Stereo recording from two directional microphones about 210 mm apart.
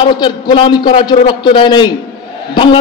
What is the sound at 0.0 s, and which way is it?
A man's voice, 20° left (ahead or behind).